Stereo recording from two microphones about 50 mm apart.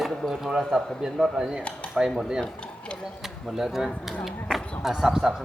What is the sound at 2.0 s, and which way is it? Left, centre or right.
Speech, centre.